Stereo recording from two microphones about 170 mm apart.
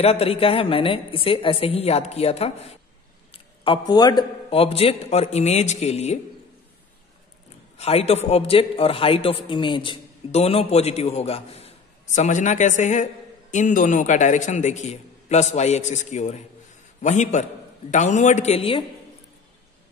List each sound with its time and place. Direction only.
0.0 s a man's voice: 35° left (ahead or behind)
7.7 s a man's voice: 35° left (ahead or behind)